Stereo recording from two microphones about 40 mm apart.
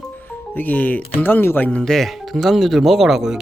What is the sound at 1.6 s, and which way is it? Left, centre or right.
Speech, left.